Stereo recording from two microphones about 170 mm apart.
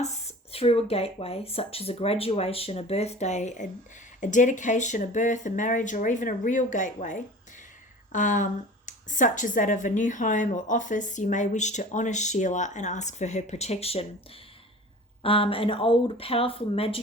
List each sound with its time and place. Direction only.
0.0 s speech: 40° left (ahead or behind)
15.2 s speech: 30° left (ahead or behind)